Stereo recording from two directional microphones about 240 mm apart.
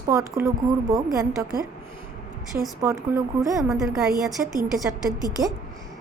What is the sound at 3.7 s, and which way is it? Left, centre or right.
Speech, centre.